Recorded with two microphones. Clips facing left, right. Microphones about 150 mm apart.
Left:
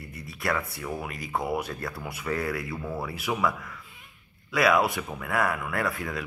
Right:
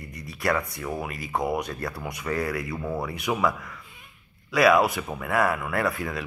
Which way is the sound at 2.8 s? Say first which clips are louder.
Right 3 dB; 20° right (ahead or behind).